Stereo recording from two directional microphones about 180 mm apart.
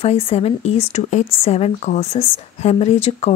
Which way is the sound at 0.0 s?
35° left (ahead or behind).